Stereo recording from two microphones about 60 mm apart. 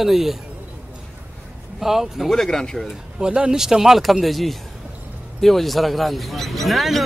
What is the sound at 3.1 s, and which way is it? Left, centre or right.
Speech, centre.